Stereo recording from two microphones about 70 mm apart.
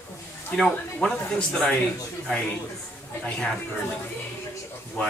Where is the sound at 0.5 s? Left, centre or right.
Centre.